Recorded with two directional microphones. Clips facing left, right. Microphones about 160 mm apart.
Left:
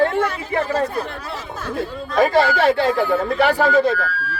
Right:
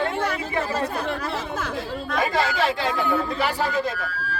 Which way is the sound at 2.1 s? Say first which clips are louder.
Left 8 dB; 55° left (ahead or behind).